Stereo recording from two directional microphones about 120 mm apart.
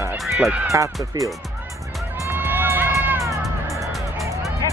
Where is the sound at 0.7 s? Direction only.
25° right (ahead or behind).